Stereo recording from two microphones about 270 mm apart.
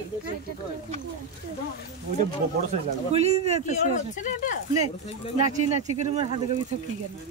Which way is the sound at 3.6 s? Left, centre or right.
Left.